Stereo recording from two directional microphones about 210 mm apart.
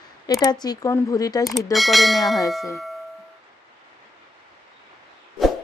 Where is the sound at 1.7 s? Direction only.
Centre (ahead or behind).